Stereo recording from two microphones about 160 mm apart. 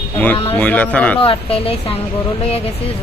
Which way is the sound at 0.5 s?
10° left (ahead or behind).